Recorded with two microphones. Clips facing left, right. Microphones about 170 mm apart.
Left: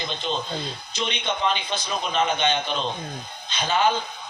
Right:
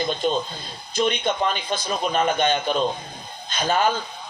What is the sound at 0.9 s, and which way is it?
A man's voice, 50° right (ahead or behind).